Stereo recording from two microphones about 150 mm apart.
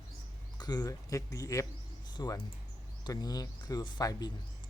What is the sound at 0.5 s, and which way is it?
Speech, 25° left (ahead or behind).